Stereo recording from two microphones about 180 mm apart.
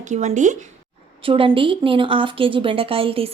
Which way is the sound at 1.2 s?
30° right (ahead or behind).